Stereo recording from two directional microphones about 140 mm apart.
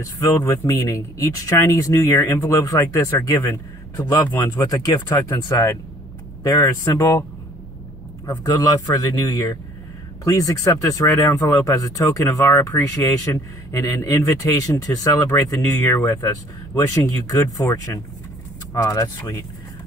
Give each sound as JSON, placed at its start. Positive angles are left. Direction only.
{"t": 0.2, "sound": "speech", "side_deg": 15}
{"t": 8.5, "sound": "speech", "side_deg": 25}